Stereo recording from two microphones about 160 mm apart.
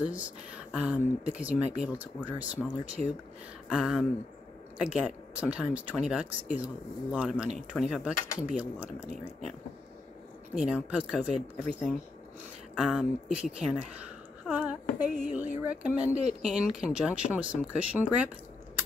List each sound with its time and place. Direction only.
0.0 s speech: 10° right (ahead or behind)
10.5 s speech: 5° right (ahead or behind)
16.1 s speech: 45° right (ahead or behind)
16.4 s speech: 5° right (ahead or behind)